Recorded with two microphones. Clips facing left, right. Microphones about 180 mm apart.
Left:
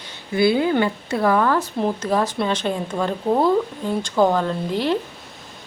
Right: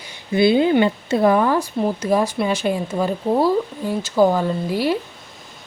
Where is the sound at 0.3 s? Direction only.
20° right (ahead or behind).